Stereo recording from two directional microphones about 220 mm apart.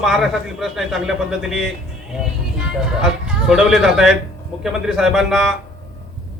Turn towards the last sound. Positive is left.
turn(degrees=0)  # may be behind; listen again after turning